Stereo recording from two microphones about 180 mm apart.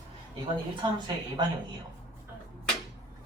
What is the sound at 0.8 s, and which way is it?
Speech, 25° right (ahead or behind).